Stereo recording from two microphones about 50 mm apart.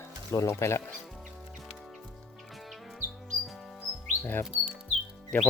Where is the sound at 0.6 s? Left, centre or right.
Left.